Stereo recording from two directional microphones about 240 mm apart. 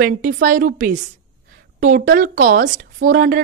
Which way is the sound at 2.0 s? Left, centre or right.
Right.